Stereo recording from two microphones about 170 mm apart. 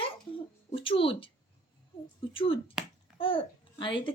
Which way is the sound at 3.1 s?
5° right (ahead or behind).